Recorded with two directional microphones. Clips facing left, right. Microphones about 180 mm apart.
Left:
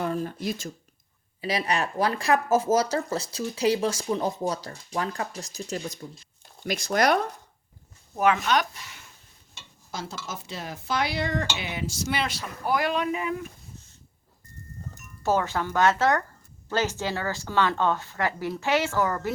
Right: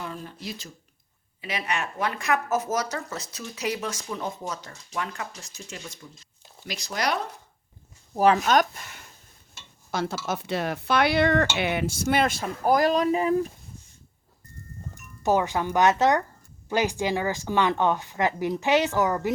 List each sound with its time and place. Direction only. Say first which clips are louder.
0.0 s speech: left 8 dB; 45° left (ahead or behind)
1.4 s speech: left 4 dB; 35° left (ahead or behind)
6.7 s speech: left 6 dB; 50° left (ahead or behind)
8.1 s speech: right 3 dB; 35° right (ahead or behind); by 9.0 s 50° right (ahead or behind)
9.9 s speech: right 7 dB; 65° right (ahead or behind); by 13.5 s 35° right (ahead or behind)
15.2 s speech: right 2 dB; 15° right (ahead or behind)